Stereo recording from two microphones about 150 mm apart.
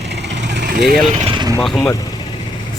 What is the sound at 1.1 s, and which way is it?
Vehicle, 35° right (ahead or behind).